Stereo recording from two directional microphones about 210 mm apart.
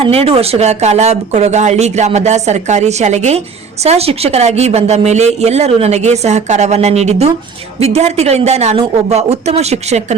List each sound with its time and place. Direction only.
0.0 s speech: 30° right (ahead or behind)